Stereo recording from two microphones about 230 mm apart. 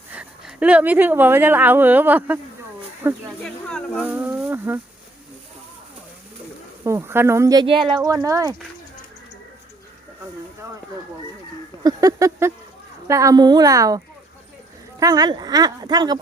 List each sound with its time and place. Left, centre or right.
0.1 s a woman's voice: centre
3.4 s speech: centre
4.0 s speech: centre
6.8 s speech: centre
10.6 s speech: centre